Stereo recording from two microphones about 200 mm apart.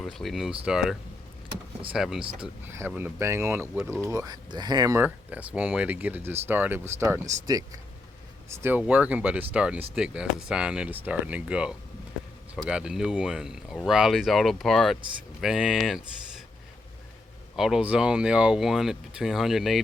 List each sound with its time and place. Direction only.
0.0 s speech: centre (ahead or behind)
17.6 s speech: 5° right (ahead or behind)